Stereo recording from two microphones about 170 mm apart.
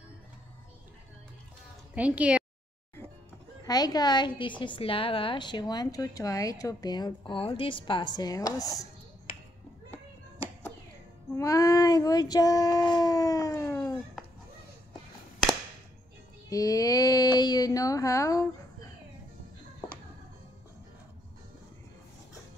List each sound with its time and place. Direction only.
2.0 s a woman's voice: 10° right (ahead or behind)
3.6 s a woman's voice: 25° left (ahead or behind)
11.3 s a woman's voice: 20° left (ahead or behind)
16.4 s a woman's voice: 20° left (ahead or behind)